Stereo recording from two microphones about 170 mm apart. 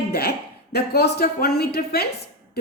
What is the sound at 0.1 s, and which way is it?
A woman's voice, 65° left (ahead or behind).